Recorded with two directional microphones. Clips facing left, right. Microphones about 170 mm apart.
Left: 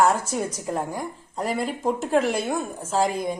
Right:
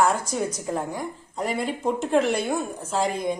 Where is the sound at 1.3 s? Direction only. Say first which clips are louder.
Left 1 dB; centre (ahead or behind).